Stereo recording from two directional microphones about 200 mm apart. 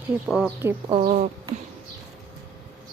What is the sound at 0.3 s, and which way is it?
Speech, 5° right (ahead or behind).